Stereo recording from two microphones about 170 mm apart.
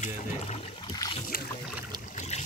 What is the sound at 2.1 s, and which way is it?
Boat, 40° left (ahead or behind).